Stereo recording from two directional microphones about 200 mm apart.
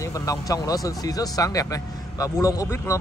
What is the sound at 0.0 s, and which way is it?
Speech, 15° left (ahead or behind).